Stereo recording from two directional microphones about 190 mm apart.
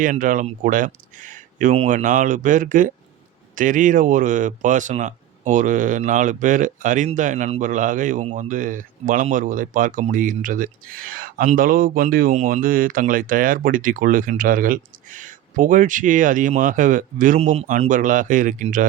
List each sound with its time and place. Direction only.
0.0 s speech: 45° right (ahead or behind)